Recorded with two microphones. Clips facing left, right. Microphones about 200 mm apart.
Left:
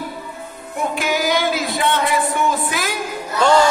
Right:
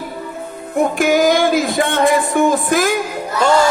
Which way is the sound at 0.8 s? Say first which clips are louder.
Right 8 dB; 50° right (ahead or behind).